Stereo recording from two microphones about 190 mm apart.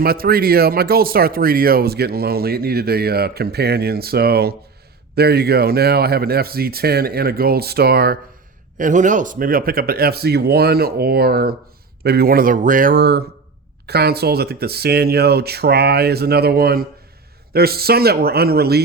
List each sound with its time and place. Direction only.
0.0 s speech: 55° right (ahead or behind)
8.8 s speech: 40° right (ahead or behind)